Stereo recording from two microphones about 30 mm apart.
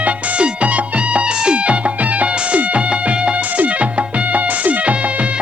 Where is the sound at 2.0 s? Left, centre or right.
Right.